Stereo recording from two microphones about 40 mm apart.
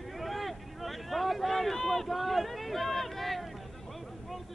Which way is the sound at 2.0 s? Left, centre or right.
Centre.